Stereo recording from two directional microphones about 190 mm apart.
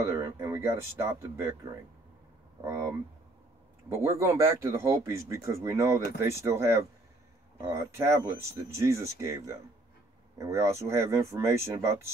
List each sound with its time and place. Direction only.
0.0 s speech: 15° right (ahead or behind)
2.6 s speech: 15° right (ahead or behind)